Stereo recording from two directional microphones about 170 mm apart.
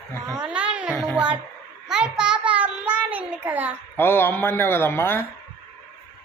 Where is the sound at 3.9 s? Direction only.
15° left (ahead or behind).